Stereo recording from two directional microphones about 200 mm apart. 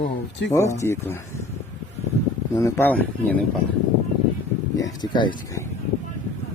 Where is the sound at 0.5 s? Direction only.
15° left (ahead or behind).